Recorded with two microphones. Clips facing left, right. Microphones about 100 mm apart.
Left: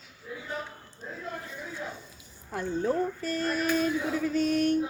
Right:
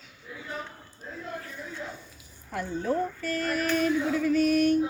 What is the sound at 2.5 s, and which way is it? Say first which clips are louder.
Speech: left 1 dB; 25° left (ahead or behind).